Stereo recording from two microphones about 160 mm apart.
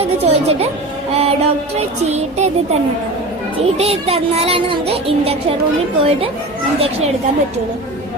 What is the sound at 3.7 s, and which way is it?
A child's voice, 40° right (ahead or behind).